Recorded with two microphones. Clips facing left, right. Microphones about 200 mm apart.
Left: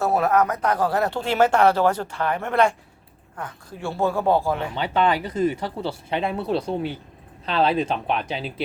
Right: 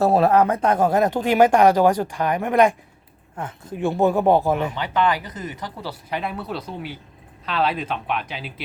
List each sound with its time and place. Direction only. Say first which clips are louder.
0.0 s speech: right 4 dB; 30° right (ahead or behind)
4.7 s speech: even; 30° left (ahead or behind)